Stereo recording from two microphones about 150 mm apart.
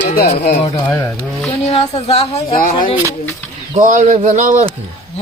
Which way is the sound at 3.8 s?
55° right (ahead or behind).